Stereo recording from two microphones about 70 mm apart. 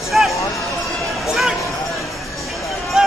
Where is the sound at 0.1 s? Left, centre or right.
Centre.